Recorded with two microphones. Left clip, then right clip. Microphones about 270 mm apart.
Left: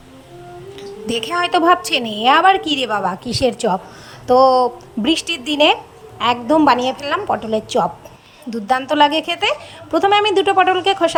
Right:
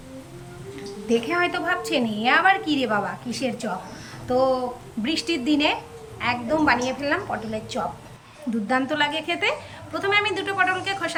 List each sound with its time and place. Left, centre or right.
0.8 s a woman's voice: left